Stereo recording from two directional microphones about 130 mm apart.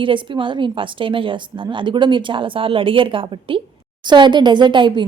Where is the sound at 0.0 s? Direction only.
40° right (ahead or behind).